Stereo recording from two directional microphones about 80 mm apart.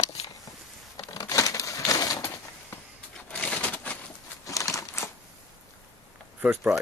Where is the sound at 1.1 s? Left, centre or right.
Left.